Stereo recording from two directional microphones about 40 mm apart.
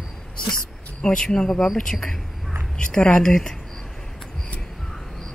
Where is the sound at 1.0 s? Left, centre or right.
Left.